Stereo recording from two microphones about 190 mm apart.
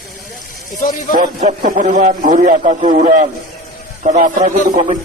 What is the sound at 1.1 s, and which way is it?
A man's voice, 45° right (ahead or behind).